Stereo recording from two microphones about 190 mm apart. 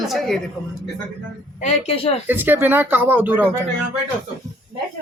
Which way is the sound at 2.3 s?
10° right (ahead or behind).